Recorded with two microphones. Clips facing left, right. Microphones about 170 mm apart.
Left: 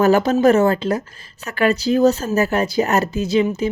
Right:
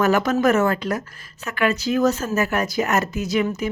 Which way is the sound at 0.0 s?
30° left (ahead or behind).